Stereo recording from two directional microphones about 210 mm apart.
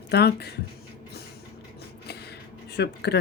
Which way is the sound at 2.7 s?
50° left (ahead or behind).